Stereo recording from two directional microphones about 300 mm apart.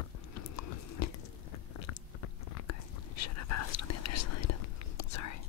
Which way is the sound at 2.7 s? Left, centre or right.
Left.